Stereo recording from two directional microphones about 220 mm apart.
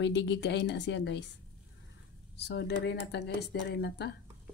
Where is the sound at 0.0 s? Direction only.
55° left (ahead or behind).